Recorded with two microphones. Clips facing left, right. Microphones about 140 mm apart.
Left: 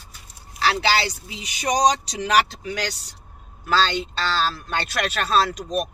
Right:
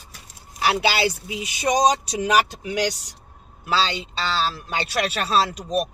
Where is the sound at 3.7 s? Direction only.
5° right (ahead or behind).